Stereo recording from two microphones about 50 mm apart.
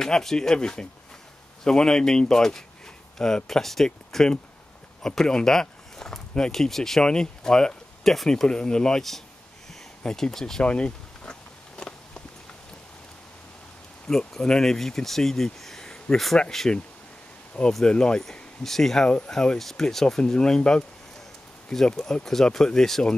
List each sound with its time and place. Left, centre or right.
0.0 s speech: centre
10.6 s a sound: left
14.0 s speech: centre
17.8 s speech: centre